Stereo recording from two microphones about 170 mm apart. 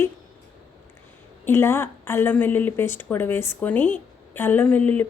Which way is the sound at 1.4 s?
15° left (ahead or behind).